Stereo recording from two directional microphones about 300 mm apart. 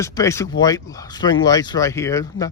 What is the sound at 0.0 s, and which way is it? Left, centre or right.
Speech, centre.